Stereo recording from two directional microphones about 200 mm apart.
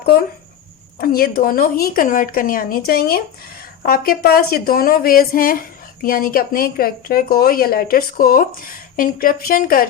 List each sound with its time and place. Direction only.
0.0 s a woman's voice: 50° left (ahead or behind)